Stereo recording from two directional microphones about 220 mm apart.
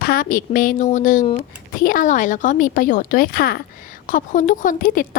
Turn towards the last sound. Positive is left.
turn(degrees=40)  # may be behind; listen again after turning